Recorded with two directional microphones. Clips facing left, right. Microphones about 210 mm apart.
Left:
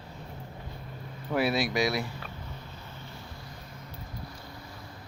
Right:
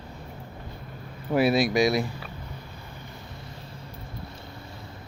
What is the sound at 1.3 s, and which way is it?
Speech, 15° right (ahead or behind).